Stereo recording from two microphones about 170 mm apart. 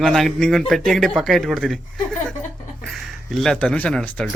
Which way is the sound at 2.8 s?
Centre (ahead or behind).